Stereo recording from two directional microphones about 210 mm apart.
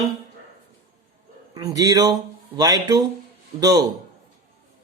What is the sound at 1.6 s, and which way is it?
Speech, 15° right (ahead or behind).